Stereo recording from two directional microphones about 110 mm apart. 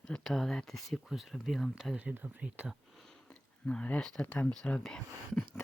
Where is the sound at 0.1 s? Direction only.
Centre (ahead or behind).